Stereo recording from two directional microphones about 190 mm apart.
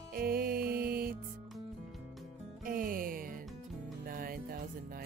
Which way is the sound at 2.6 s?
45° right (ahead or behind).